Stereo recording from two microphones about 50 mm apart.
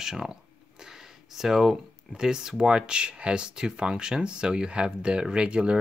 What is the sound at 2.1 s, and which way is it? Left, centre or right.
Speech, centre.